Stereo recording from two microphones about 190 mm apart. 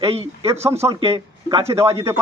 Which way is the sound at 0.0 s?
30° right (ahead or behind).